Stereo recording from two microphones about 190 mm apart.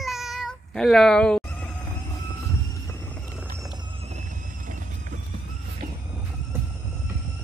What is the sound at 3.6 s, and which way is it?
Horse, 20° right (ahead or behind).